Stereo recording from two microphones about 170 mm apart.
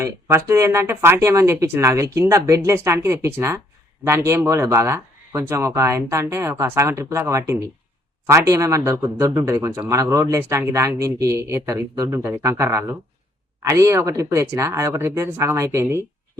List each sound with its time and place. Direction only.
0.0 s speech: 15° right (ahead or behind)